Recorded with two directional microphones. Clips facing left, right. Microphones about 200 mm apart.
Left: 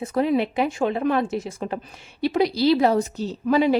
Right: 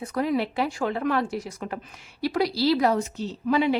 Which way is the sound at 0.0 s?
25° left (ahead or behind).